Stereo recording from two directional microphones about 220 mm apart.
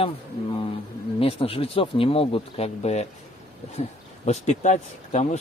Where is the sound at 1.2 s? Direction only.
25° left (ahead or behind).